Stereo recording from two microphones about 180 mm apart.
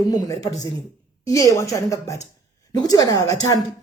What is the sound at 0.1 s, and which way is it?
A woman's voice, 20° left (ahead or behind).